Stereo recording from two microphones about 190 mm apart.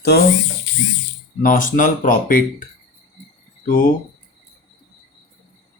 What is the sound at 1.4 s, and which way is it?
Speech, 45° left (ahead or behind).